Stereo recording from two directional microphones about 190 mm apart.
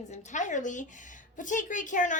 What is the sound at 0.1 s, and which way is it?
A woman's voice, 40° left (ahead or behind).